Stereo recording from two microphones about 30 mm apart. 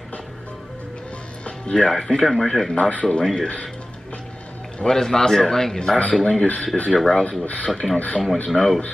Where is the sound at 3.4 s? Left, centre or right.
Left.